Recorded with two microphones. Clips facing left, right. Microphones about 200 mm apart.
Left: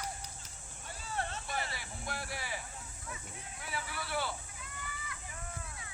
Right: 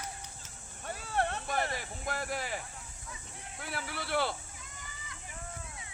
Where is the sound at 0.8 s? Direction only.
60° right (ahead or behind).